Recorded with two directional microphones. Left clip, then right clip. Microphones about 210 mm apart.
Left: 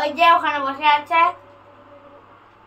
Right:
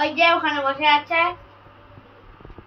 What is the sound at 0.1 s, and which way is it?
A child's voice, 25° left (ahead or behind).